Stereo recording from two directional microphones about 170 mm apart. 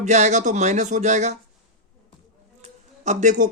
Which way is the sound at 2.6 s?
45° right (ahead or behind).